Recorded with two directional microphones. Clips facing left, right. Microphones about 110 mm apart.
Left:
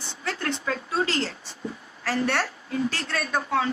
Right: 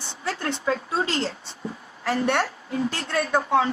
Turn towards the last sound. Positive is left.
turn(degrees=-25)  # may be behind; listen again after turning